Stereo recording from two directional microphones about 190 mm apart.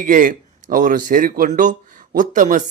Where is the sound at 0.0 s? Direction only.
45° right (ahead or behind).